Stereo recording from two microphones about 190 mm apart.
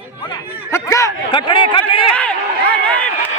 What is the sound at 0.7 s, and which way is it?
Speech, 15° left (ahead or behind).